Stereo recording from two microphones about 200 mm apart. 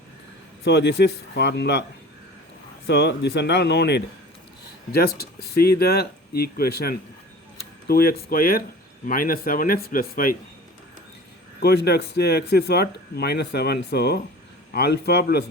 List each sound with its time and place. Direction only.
0.6 s speech: 55° left (ahead or behind)
2.8 s speech: 55° left (ahead or behind)
11.6 s speech: 55° left (ahead or behind)